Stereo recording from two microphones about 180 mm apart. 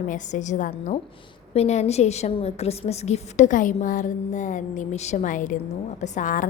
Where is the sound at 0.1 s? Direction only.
45° left (ahead or behind).